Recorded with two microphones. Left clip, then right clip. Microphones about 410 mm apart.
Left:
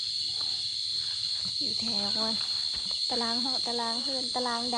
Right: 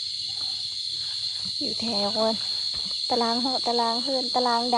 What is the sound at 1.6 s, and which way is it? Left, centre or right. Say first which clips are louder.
Speech: right 5 dB; centre.